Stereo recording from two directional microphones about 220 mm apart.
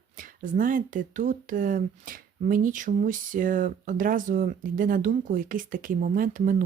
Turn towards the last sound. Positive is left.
turn(degrees=-35)  # may be behind; listen again after turning